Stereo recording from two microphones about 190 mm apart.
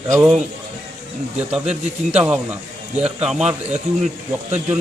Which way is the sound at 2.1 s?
10° right (ahead or behind).